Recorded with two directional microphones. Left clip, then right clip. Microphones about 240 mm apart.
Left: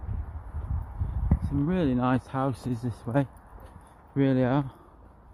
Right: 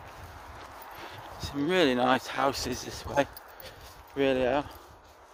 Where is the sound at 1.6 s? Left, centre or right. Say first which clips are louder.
Right 4 dB; centre.